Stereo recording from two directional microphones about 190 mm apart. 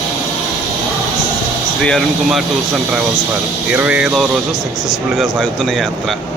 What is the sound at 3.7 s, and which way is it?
Speech, 5° right (ahead or behind).